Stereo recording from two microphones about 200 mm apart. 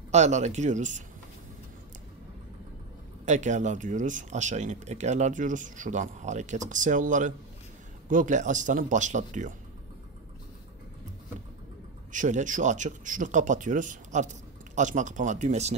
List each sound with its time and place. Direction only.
0.1 s speech: 35° right (ahead or behind)
3.3 s speech: 35° right (ahead or behind)
12.1 s speech: 40° right (ahead or behind)